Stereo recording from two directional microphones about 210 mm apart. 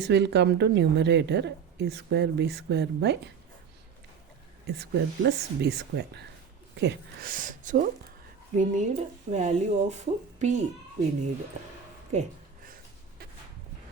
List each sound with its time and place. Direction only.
0.0 s a woman's voice: 55° right (ahead or behind)
4.6 s a woman's voice: 50° right (ahead or behind); by 10.6 s 35° right (ahead or behind)
12.1 s speech: 30° right (ahead or behind)
12.6 s a sound: 40° right (ahead or behind)